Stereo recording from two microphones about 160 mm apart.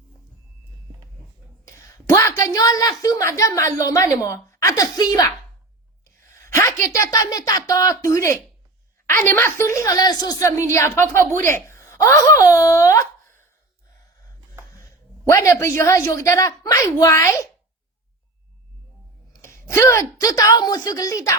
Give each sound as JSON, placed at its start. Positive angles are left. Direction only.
{"t": 1.6, "sound": "a woman's voice", "side_deg": 20}
{"t": 14.8, "sound": "speech", "side_deg": 20}
{"t": 19.3, "sound": "a woman's voice", "side_deg": 20}